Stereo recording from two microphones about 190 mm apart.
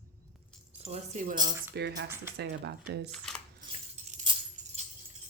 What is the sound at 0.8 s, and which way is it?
Speech, 35° right (ahead or behind).